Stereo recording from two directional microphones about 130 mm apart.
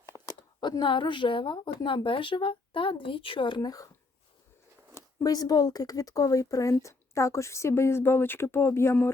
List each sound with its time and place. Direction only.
0.0 s speech: 30° left (ahead or behind)
5.2 s speech: 30° left (ahead or behind)